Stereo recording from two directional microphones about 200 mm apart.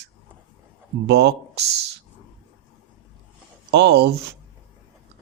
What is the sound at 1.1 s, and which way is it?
Speech, 55° right (ahead or behind).